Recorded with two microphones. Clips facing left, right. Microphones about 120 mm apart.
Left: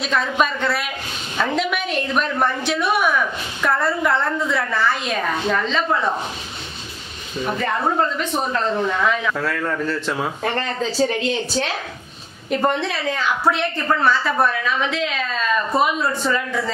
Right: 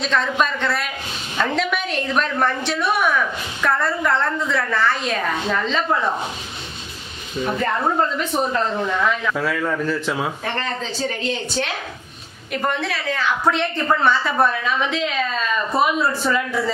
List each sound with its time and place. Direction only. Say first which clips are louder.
0.0 s a woman's voice: even; 5° left (ahead or behind)
7.4 s a woman's voice: even; centre (ahead or behind)
12.4 s a woman's voice: left 3 dB; 30° left (ahead or behind)
13.5 s a woman's voice: right 1 dB; centre (ahead or behind)